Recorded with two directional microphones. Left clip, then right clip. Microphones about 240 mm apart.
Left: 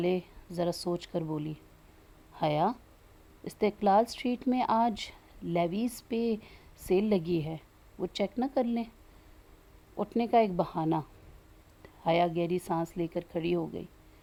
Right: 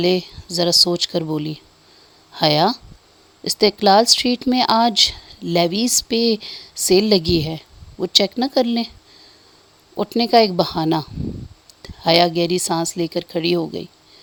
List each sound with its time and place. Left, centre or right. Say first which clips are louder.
0.0 s speech: right 12 dB; right
9.9 s speech: right 11 dB; right